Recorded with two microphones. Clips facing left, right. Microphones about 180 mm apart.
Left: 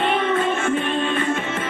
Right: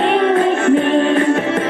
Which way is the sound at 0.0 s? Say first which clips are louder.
Right 7 dB; 60° right (ahead or behind).